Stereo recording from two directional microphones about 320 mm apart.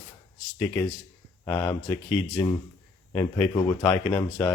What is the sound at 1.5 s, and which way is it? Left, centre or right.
Speech, centre.